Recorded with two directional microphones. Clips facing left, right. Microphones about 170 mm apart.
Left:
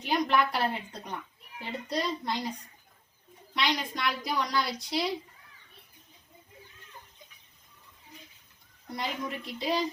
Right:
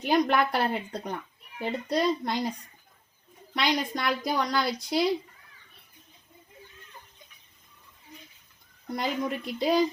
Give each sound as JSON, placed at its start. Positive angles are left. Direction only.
{"t": 0.0, "sound": "a woman's voice", "side_deg": -55}
{"t": 3.5, "sound": "a woman's voice", "side_deg": -50}
{"t": 9.0, "sound": "a woman's voice", "side_deg": -50}